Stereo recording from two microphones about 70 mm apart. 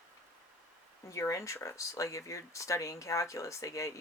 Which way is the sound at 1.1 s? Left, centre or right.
Left.